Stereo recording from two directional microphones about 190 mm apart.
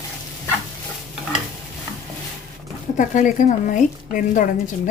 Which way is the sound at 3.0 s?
40° left (ahead or behind).